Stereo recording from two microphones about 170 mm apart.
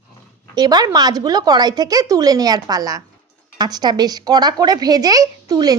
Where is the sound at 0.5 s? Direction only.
25° right (ahead or behind).